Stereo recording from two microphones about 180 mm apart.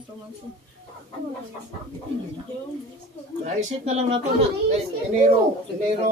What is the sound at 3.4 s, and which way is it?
Speech, 40° right (ahead or behind).